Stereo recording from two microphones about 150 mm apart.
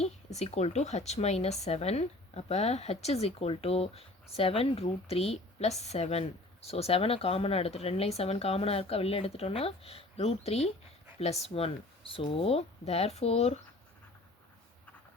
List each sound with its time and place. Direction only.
0.0 s speech: 45° left (ahead or behind)